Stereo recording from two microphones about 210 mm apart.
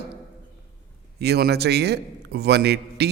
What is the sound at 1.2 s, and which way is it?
A man's voice, 50° right (ahead or behind).